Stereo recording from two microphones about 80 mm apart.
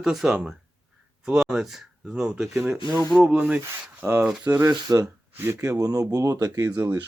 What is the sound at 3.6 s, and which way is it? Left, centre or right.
Speech, right.